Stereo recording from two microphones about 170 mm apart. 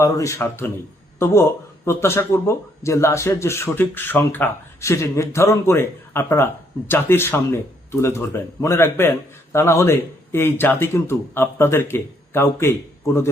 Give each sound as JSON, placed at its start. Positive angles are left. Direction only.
{"t": 0.0, "sound": "speech", "side_deg": 15}